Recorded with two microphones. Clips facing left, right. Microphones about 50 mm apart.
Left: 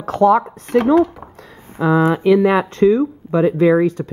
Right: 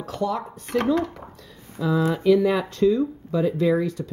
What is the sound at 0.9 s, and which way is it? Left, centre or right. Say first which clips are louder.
Speech: left 11 dB; centre.